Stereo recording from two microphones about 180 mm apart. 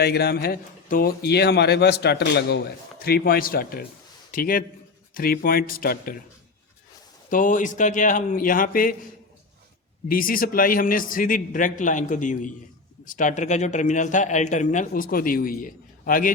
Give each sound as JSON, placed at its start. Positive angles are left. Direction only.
{"t": 0.0, "sound": "a man's voice", "side_deg": 65}
{"t": 7.3, "sound": "speech", "side_deg": 45}
{"t": 10.1, "sound": "speech", "side_deg": 50}